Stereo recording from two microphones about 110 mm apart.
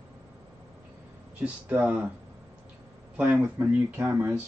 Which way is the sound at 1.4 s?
15° right (ahead or behind).